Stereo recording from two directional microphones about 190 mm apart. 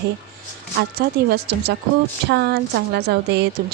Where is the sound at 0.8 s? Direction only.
55° right (ahead or behind).